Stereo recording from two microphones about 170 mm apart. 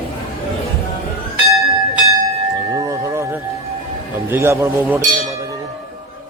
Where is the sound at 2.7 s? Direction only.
20° right (ahead or behind).